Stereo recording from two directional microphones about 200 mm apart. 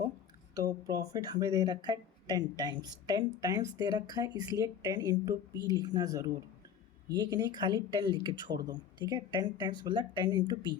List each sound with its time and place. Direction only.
0.5 s speech: 15° right (ahead or behind)